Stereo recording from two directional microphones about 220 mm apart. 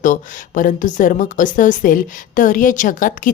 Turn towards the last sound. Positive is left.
turn(degrees=35)  # may be behind; listen again after turning